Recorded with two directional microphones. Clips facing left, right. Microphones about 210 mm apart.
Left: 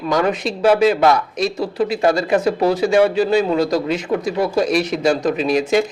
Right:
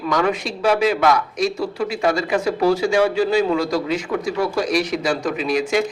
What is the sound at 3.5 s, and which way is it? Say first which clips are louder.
A man's voice: left 3 dB; 20° left (ahead or behind).